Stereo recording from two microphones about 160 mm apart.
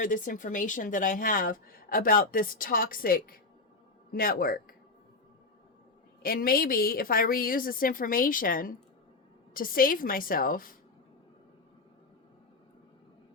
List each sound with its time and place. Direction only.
0.0 s a woman's voice: 55° left (ahead or behind)
6.2 s a woman's voice: 65° left (ahead or behind)